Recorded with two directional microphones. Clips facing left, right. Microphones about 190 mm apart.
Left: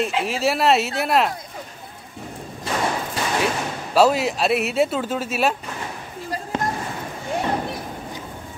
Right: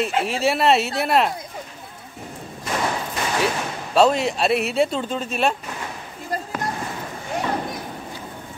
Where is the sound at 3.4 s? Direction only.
5° left (ahead or behind).